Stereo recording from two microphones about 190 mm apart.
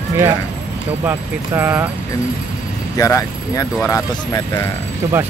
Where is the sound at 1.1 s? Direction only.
10° right (ahead or behind).